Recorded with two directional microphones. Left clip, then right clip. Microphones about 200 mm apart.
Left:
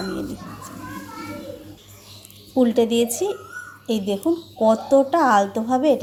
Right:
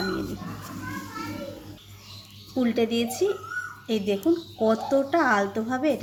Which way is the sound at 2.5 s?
15° left (ahead or behind).